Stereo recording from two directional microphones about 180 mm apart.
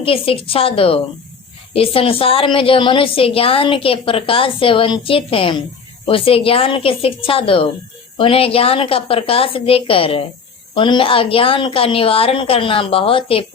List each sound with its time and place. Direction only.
0.0 s a woman's voice: 30° left (ahead or behind)